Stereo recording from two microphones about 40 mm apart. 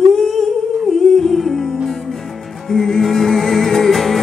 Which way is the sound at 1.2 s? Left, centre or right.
Centre.